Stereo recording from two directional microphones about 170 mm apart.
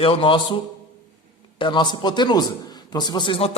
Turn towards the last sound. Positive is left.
turn(degrees=30)  # may be behind; listen again after turning